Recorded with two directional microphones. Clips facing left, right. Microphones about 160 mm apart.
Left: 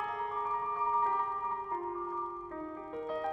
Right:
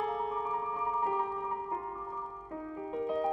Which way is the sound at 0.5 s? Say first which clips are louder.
Even; 15° right (ahead or behind).